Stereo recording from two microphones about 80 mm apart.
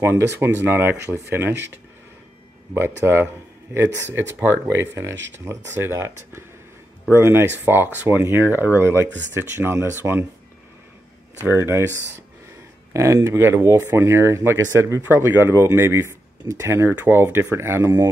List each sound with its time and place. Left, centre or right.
0.0 s speech: right
4.4 s speech: right
11.4 s speech: right
12.9 s speech: right